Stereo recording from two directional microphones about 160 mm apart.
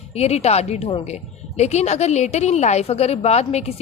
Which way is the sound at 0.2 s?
40° left (ahead or behind).